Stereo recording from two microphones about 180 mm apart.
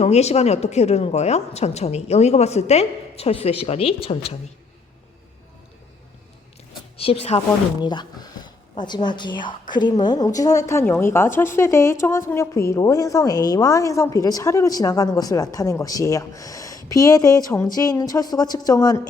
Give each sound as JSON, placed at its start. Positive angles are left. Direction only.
{"t": 0.0, "sound": "a woman's voice", "side_deg": 35}
{"t": 6.9, "sound": "a woman's voice", "side_deg": 30}